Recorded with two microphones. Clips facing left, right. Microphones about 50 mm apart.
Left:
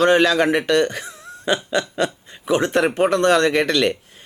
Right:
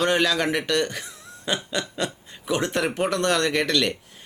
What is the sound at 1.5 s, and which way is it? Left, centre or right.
Speech, left.